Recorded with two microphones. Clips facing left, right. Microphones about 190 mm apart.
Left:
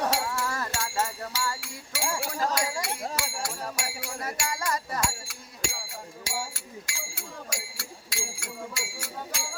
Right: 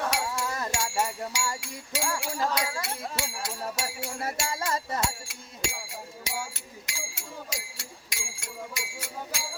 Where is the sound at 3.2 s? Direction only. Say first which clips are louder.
Even; 20° right (ahead or behind).